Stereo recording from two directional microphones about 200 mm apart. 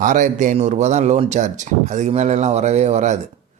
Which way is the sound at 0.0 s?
40° right (ahead or behind).